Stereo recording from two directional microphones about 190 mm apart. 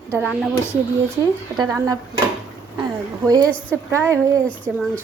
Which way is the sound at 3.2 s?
20° right (ahead or behind).